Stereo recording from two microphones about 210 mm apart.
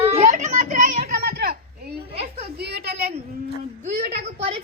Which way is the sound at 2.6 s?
50° right (ahead or behind).